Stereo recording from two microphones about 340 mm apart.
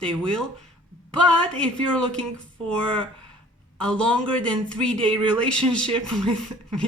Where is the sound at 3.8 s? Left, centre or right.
Centre.